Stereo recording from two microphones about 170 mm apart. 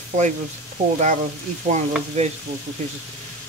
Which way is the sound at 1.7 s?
40° right (ahead or behind).